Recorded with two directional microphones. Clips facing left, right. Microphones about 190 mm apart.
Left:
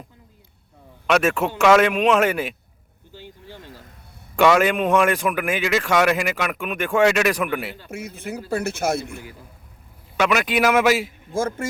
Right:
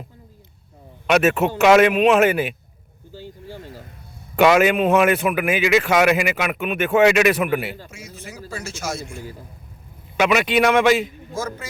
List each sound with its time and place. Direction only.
1.0 s speech: 5° right (ahead or behind)
3.1 s a sound: 40° right (ahead or behind)
4.4 s speech: 5° right (ahead or behind)
7.9 s a man's voice: 60° left (ahead or behind)
10.2 s speech: centre (ahead or behind)
11.3 s a man's voice: 50° left (ahead or behind)